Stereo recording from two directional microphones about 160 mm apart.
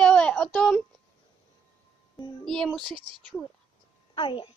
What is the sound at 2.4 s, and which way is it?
Speech, 5° left (ahead or behind).